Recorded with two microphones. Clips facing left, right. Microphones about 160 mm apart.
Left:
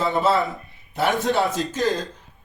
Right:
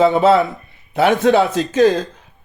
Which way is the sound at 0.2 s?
75° right (ahead or behind).